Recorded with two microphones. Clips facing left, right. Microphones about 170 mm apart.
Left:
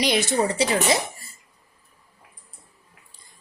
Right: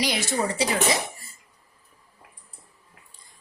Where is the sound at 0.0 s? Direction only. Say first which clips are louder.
Left 4 dB; 20° left (ahead or behind).